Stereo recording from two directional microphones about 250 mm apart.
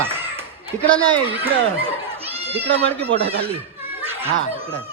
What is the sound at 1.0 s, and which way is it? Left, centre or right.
Speech, centre.